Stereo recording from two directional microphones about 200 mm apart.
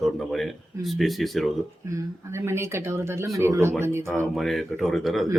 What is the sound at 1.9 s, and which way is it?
Speech, 15° right (ahead or behind).